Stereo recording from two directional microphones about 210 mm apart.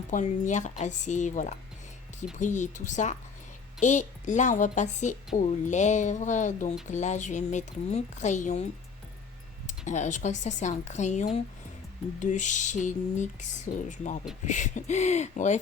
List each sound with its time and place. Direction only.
0.1 s a woman's voice: 35° left (ahead or behind)
9.6 s a woman's voice: 35° left (ahead or behind)